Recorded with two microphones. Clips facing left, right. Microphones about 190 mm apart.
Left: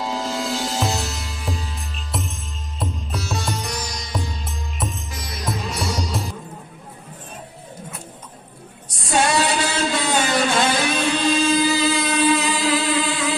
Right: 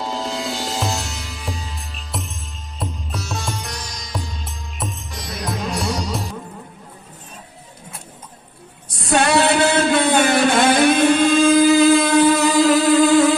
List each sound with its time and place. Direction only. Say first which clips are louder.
0.0 s music: even; centre (ahead or behind)
8.9 s singing: right 3 dB; 60° right (ahead or behind); by 13.3 s 45° right (ahead or behind)